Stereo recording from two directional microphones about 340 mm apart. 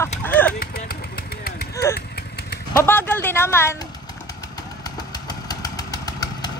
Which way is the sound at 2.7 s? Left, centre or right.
Centre.